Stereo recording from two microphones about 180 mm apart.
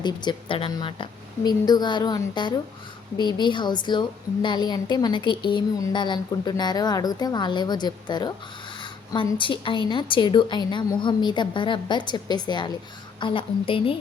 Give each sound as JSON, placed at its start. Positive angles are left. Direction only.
{"t": 0.0, "sound": "a woman's voice", "side_deg": 25}